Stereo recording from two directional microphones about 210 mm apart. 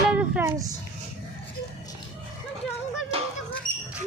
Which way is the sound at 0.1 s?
5° right (ahead or behind).